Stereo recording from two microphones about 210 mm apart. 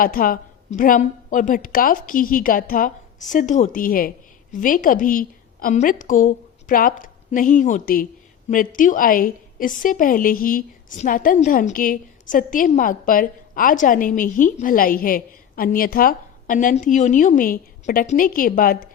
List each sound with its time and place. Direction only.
0.0 s a woman's voice: 40° left (ahead or behind)